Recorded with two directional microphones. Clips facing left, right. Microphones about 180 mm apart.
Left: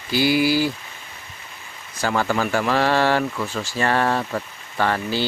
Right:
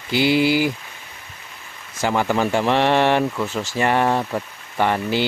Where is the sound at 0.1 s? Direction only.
25° right (ahead or behind).